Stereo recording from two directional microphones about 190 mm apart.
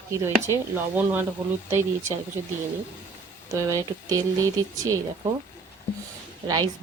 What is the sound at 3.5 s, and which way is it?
Speech, 15° right (ahead or behind).